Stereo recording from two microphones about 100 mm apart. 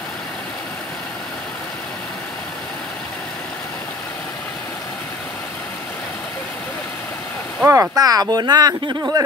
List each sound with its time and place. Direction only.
7.6 s speech: 25° right (ahead or behind)
7.9 s speech: 40° right (ahead or behind)